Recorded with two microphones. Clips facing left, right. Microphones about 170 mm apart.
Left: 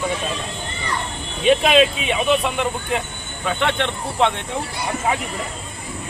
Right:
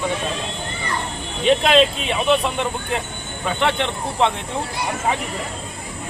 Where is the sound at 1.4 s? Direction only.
5° left (ahead or behind).